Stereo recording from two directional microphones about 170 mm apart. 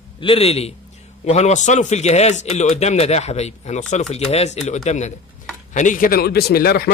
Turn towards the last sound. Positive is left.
turn(degrees=65)  # may be behind; listen again after turning